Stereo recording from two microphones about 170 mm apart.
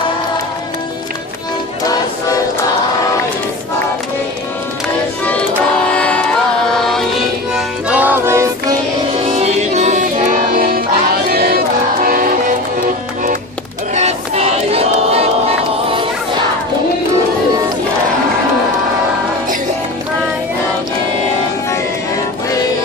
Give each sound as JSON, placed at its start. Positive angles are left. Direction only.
{"t": 5.9, "sound": "music", "side_deg": 5}
{"t": 9.2, "sound": "music", "side_deg": -40}
{"t": 10.5, "sound": "music", "side_deg": -60}
{"t": 13.9, "sound": "crowd", "side_deg": -40}